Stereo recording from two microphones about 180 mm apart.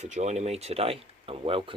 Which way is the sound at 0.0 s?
40° right (ahead or behind).